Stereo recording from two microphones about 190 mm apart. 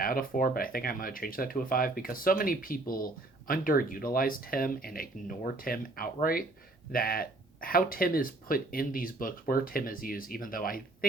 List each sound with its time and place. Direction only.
0.0 s speech: 50° left (ahead or behind)